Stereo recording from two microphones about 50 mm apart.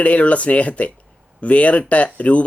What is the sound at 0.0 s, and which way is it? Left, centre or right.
Speech, left.